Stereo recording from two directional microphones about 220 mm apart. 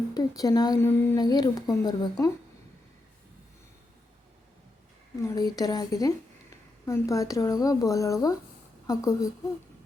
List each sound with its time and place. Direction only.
0.1 s a woman's voice: 15° left (ahead or behind)
5.2 s a woman's voice: 15° left (ahead or behind)